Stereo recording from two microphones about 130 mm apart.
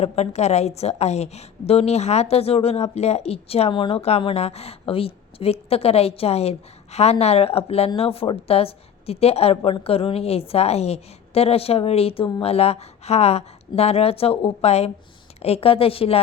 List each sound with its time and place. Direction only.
0.0 s a woman's voice: 55° left (ahead or behind)